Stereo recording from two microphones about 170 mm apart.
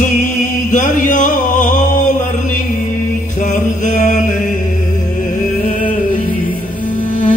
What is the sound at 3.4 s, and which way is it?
Chant, 45° left (ahead or behind).